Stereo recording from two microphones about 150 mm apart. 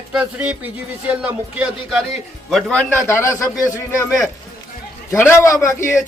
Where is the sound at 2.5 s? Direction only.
10° left (ahead or behind).